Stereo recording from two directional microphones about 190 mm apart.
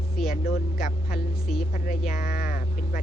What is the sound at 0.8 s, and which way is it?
Speech, 50° left (ahead or behind).